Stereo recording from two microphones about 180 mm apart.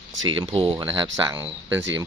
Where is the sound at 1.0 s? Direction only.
25° right (ahead or behind).